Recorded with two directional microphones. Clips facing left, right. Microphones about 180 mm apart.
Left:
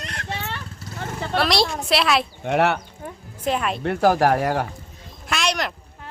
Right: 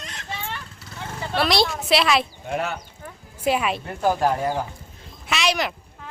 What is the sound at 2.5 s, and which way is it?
Speech, 70° left (ahead or behind).